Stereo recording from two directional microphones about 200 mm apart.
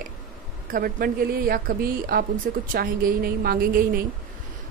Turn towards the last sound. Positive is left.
turn(degrees=-45)  # may be behind; listen again after turning